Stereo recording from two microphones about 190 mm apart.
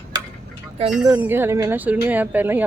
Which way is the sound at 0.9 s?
10° right (ahead or behind).